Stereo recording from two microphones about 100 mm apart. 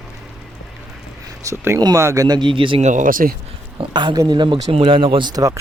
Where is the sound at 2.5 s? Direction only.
60° right (ahead or behind).